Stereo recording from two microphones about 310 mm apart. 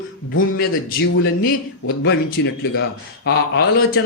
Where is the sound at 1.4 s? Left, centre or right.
Left.